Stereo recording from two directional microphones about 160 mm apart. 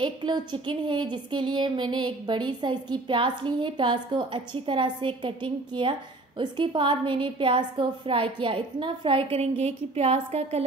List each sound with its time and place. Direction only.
0.0 s speech: 30° right (ahead or behind)